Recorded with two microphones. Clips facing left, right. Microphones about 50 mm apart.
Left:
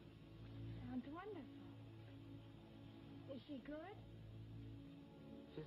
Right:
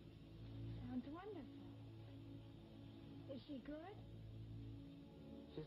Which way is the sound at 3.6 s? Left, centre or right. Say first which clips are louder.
Left 1 dB; centre.